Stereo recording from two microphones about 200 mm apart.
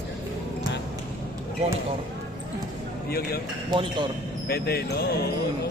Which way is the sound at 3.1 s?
50° left (ahead or behind).